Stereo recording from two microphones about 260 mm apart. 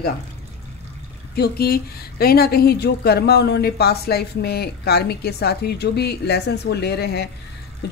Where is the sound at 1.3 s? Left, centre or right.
Left.